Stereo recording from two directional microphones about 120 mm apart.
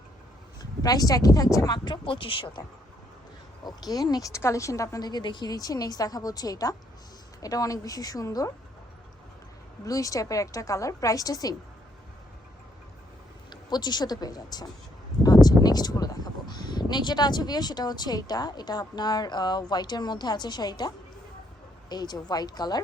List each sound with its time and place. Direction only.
0.6 s speech: 30° left (ahead or behind)
3.7 s a woman's voice: 35° left (ahead or behind)
9.8 s a woman's voice: 30° left (ahead or behind)
13.5 s a woman's voice: 35° left (ahead or behind)